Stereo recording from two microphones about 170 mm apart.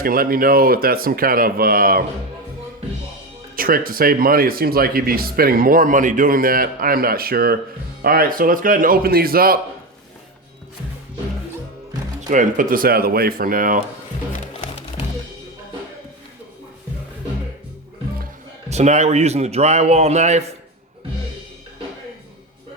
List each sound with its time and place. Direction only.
0.0 s speech: 60° right (ahead or behind)
3.5 s speech: 55° right (ahead or behind)
12.3 s speech: 50° right (ahead or behind)
18.7 s a man's voice: 40° right (ahead or behind)